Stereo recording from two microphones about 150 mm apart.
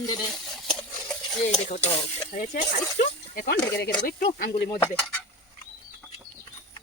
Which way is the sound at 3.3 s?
90° left.